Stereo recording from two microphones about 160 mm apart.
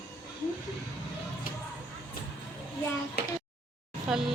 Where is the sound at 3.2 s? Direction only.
90° left.